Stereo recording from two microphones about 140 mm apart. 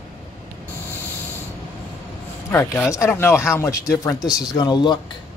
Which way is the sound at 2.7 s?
15° left (ahead or behind).